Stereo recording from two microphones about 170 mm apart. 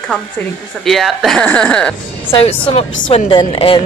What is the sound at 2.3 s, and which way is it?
A woman's voice, 35° left (ahead or behind).